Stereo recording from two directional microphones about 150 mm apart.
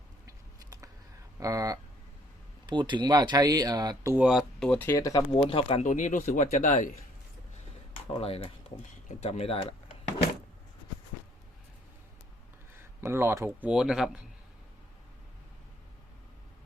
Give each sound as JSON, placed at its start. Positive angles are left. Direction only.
{"t": 0.3, "sound": "a sound", "side_deg": -20}
{"t": 1.4, "sound": "speech", "side_deg": -20}
{"t": 4.1, "sound": "speech", "side_deg": -5}
{"t": 5.4, "sound": "speech", "side_deg": 35}
{"t": 5.8, "sound": "speech", "side_deg": 55}
{"t": 8.2, "sound": "speech", "side_deg": 40}
{"t": 13.0, "sound": "speech", "side_deg": -15}